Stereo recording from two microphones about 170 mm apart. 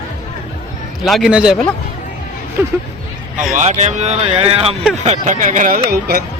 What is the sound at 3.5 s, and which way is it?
Speech, 45° right (ahead or behind).